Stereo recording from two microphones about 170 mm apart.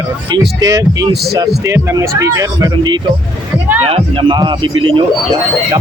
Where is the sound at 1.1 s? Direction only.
70° right (ahead or behind).